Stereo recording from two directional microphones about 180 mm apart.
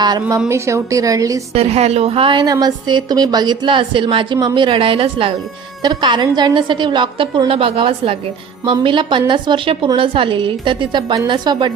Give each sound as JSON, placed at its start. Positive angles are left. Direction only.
{"t": 0.0, "sound": "a woman's voice", "side_deg": -20}
{"t": 1.5, "sound": "a woman's voice", "side_deg": -35}